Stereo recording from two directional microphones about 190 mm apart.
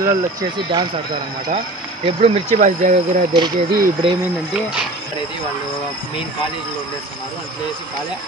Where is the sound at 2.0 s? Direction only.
35° right (ahead or behind).